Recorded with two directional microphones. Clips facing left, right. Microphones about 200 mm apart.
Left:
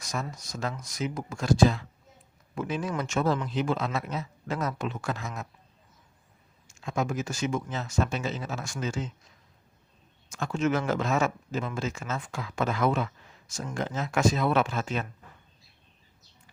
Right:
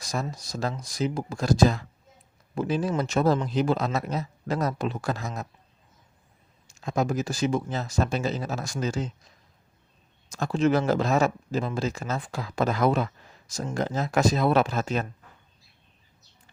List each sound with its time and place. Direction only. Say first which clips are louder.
0.0 s speech: right 3 dB; 35° right (ahead or behind)
6.7 s speech: right 4 dB; 35° right (ahead or behind)
10.2 s speech: right 4 dB; 35° right (ahead or behind)